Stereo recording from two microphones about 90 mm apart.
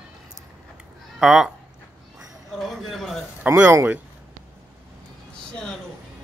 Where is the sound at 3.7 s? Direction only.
30° right (ahead or behind).